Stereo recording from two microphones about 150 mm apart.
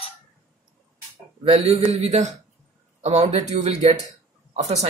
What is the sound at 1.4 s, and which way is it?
Speech, 40° right (ahead or behind).